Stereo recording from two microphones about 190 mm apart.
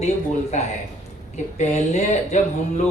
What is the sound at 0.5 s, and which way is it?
Speech, 35° left (ahead or behind).